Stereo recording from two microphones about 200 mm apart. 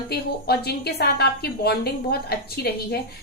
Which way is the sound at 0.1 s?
55° left (ahead or behind).